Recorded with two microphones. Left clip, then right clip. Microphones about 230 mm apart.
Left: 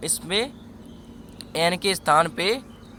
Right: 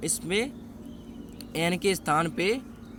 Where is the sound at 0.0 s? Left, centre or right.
Centre.